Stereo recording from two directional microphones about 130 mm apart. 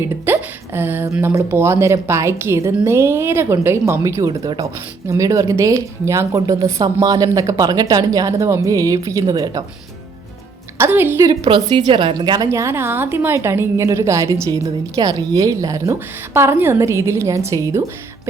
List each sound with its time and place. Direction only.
0.3 s hiccup: 15° right (ahead or behind)
1.2 s a woman's voice: 20° right (ahead or behind)
10.8 s a woman's voice: 15° right (ahead or behind)
11.3 s a woman's voice: 30° right (ahead or behind)
12.5 s a woman's voice: 20° right (ahead or behind)